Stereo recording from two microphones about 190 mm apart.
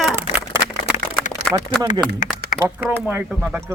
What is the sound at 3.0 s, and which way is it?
Speech, 5° right (ahead or behind).